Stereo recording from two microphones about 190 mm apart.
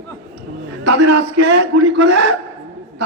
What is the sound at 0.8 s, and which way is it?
A man's voice, 65° right (ahead or behind).